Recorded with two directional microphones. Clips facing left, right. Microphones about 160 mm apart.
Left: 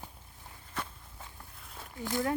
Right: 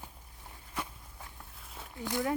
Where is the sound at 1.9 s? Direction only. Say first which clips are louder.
Left 1 dB; 20° right (ahead or behind).